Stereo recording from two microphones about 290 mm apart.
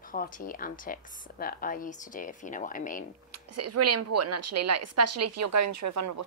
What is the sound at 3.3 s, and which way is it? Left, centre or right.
A woman's voice, right.